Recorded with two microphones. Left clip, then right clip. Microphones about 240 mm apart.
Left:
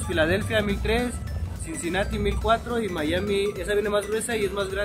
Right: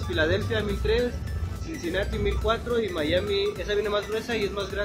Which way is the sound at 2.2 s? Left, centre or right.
Left.